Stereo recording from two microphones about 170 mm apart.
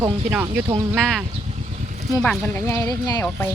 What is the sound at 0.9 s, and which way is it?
Speech, centre (ahead or behind).